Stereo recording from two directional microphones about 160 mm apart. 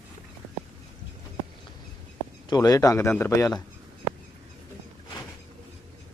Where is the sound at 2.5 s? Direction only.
25° left (ahead or behind).